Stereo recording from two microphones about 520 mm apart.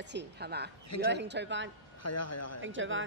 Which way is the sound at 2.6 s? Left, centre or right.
Right.